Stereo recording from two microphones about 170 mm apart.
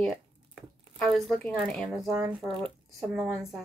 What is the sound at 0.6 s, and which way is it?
Speech, centre (ahead or behind).